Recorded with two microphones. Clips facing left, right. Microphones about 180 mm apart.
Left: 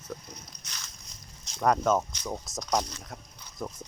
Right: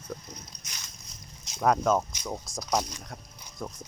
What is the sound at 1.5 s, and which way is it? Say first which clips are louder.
Speech: even; centre (ahead or behind).